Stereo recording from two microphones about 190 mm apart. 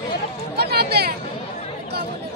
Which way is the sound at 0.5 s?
55° right (ahead or behind).